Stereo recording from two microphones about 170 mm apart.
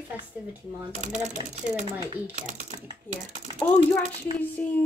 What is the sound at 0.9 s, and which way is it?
Speech, 45° right (ahead or behind).